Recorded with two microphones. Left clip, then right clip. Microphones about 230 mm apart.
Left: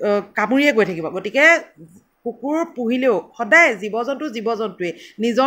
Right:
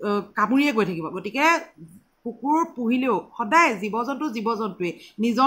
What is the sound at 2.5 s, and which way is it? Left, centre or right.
Speech, centre.